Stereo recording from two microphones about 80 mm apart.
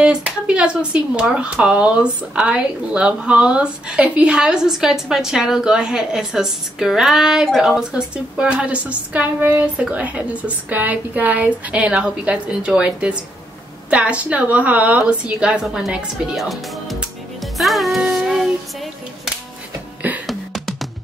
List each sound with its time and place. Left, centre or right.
0.0 s a woman's voice: centre
15.6 s a woman's voice: centre
17.4 s music: centre
20.2 s music: centre